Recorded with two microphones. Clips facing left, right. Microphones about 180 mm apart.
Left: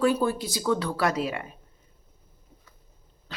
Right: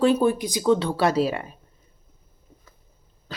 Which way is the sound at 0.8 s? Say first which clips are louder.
Right 5 dB; 25° right (ahead or behind).